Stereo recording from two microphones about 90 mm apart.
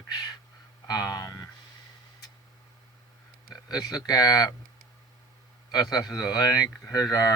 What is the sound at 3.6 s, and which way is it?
Speech, 45° left (ahead or behind).